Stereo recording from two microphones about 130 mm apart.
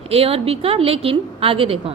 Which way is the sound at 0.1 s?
50° right (ahead or behind).